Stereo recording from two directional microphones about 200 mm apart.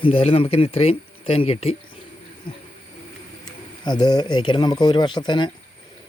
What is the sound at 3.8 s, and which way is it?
Speech, 20° left (ahead or behind).